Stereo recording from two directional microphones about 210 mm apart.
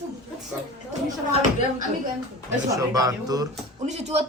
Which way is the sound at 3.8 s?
30° right (ahead or behind).